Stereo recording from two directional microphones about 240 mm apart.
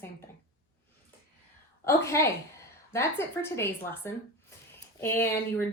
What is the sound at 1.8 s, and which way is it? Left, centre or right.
A woman's voice, centre.